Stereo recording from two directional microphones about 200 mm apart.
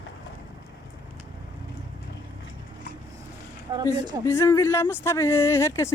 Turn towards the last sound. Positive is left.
turn(degrees=15)  # may be behind; listen again after turning